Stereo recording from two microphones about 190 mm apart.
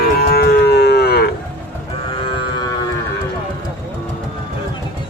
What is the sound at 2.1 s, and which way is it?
Cattle, 25° left (ahead or behind).